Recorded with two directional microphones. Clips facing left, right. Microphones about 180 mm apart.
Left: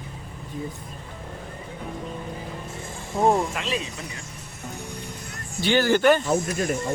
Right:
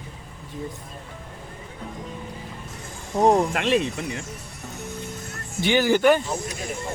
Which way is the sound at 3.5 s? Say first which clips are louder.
Right 7 dB; 60° right (ahead or behind).